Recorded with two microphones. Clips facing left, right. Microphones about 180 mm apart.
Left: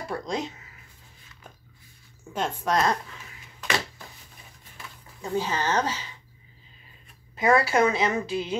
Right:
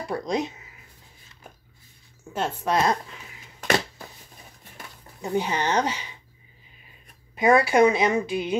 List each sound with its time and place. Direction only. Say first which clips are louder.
0.1 s speech: right 4 dB; 20° right (ahead or behind)
2.3 s speech: right 1 dB; 5° right (ahead or behind)
5.2 s a woman's voice: right 2 dB; 20° right (ahead or behind)
7.3 s a woman's voice: right 3 dB; 20° right (ahead or behind)